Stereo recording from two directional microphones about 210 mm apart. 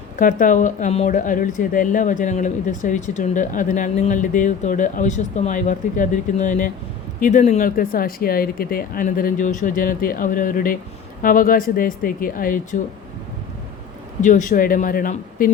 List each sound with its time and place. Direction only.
0.2 s a woman's voice: 40° left (ahead or behind)
14.2 s a woman's voice: 35° left (ahead or behind)